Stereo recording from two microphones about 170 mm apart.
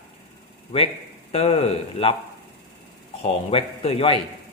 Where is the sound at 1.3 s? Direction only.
35° left (ahead or behind).